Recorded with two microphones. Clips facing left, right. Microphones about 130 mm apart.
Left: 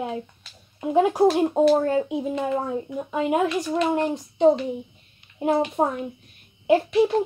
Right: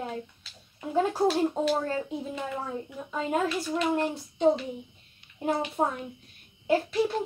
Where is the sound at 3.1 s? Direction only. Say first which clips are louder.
Left 6 dB; 15° left (ahead or behind).